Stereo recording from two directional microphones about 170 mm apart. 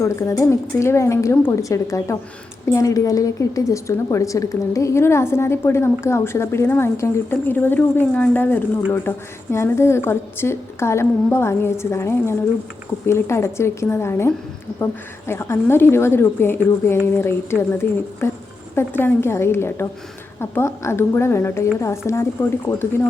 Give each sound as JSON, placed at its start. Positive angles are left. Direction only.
{"t": 0.0, "sound": "a woman's voice", "side_deg": 15}